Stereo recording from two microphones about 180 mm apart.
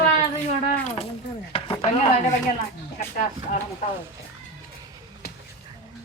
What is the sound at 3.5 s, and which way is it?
Speech, 45° left (ahead or behind).